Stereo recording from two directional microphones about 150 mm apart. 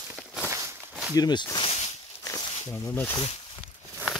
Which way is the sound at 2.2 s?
20° left (ahead or behind).